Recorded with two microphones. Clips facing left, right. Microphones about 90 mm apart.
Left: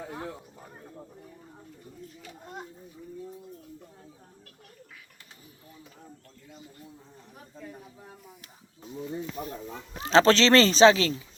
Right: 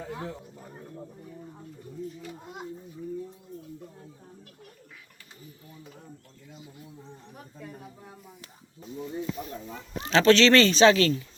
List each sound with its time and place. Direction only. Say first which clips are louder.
10.1 s speech: even; 30° left (ahead or behind)